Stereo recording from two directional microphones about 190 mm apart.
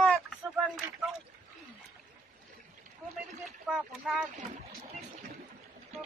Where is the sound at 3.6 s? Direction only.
5° right (ahead or behind).